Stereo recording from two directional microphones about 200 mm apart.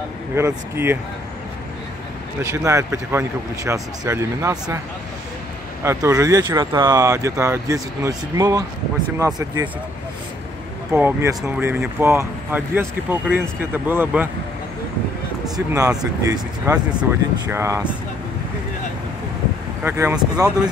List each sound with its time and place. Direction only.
0.4 s speech: 15° right (ahead or behind)
2.4 s speech: 15° right (ahead or behind)
5.9 s speech: 15° right (ahead or behind)
10.9 s speech: 10° right (ahead or behind)
15.5 s speech: 15° right (ahead or behind)
19.8 s speech: 10° right (ahead or behind)